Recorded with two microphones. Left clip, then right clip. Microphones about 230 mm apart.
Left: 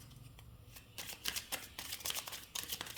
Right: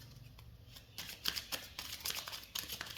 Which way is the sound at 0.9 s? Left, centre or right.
Centre.